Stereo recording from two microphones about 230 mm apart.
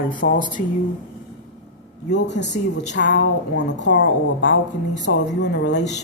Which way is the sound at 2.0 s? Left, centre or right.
Left.